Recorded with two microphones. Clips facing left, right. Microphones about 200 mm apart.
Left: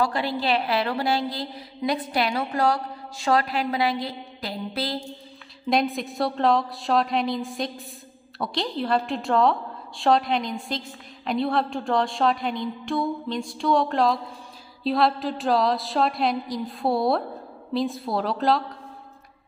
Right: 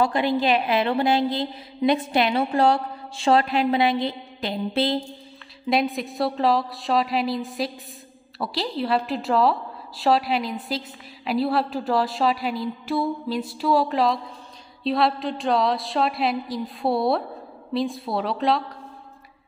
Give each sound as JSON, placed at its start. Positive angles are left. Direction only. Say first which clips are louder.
{"t": 0.0, "sound": "a woman's voice", "louder": "right 4 dB", "side_deg": -20}
{"t": 5.7, "sound": "a woman's voice", "louder": "right 1 dB", "side_deg": 0}